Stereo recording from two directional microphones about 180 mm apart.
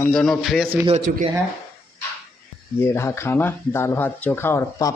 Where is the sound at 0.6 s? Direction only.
35° right (ahead or behind).